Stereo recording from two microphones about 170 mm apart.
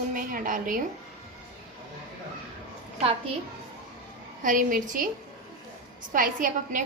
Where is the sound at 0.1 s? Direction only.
55° right (ahead or behind).